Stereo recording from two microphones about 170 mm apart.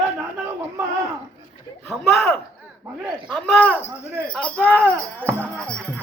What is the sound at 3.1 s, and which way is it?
Speech, centre (ahead or behind).